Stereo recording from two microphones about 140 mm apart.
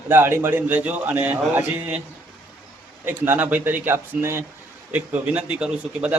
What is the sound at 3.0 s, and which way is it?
A man's voice, 15° right (ahead or behind).